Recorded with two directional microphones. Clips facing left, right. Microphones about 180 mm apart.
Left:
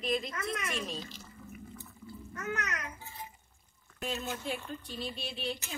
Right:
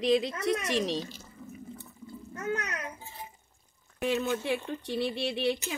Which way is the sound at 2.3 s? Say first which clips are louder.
Right 4 dB; 30° right (ahead or behind).